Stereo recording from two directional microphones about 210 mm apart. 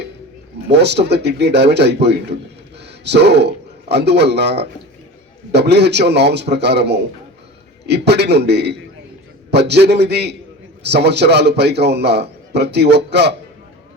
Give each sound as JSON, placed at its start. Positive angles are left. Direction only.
{"t": 0.7, "sound": "a man's voice", "side_deg": -55}